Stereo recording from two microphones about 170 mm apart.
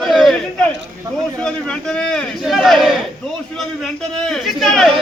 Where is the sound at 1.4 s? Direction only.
5° left (ahead or behind).